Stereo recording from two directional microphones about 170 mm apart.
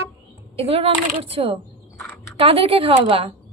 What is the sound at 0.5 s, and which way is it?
Speech, 35° right (ahead or behind).